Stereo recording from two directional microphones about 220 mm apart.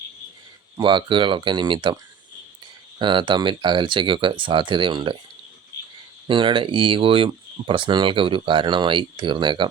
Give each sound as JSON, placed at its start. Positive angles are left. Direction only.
{"t": 0.8, "sound": "speech", "side_deg": -20}
{"t": 3.0, "sound": "speech", "side_deg": -20}
{"t": 6.2, "sound": "speech", "side_deg": -20}